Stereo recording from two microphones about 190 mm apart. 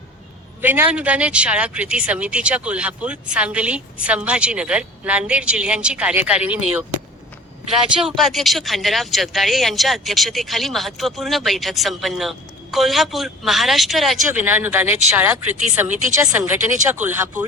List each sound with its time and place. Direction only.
0.6 s speech: 10° right (ahead or behind)
7.9 s speech: centre (ahead or behind)
15.5 s speech: 40° right (ahead or behind)
16.1 s speech: 10° right (ahead or behind)